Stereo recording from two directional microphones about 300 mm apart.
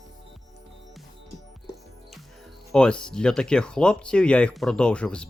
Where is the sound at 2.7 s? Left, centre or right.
Centre.